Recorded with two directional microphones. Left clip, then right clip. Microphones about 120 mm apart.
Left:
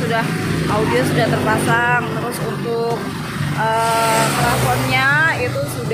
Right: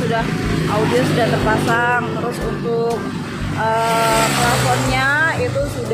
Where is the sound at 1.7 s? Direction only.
15° right (ahead or behind).